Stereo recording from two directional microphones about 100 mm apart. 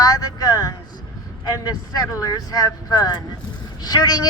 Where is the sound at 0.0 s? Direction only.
40° left (ahead or behind).